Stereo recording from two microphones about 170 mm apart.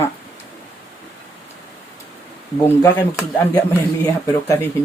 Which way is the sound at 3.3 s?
15° left (ahead or behind).